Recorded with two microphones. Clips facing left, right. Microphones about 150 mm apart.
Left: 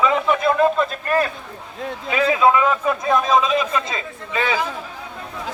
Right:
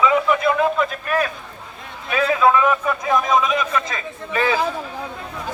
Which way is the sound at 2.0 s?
20° left (ahead or behind).